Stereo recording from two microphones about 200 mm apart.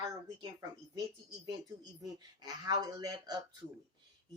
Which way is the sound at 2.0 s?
20° right (ahead or behind).